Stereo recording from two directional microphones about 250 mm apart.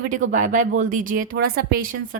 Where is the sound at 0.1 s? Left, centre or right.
Right.